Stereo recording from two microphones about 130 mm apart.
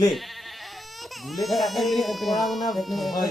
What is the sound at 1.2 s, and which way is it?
Speech, centre (ahead or behind).